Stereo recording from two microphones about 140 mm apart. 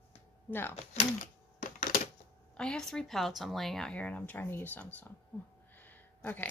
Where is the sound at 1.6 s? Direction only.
70° left (ahead or behind).